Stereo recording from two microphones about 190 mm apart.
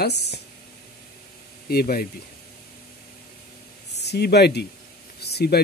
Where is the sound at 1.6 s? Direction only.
50° left (ahead or behind).